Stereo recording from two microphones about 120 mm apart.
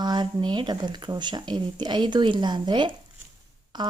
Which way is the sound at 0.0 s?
35° right (ahead or behind).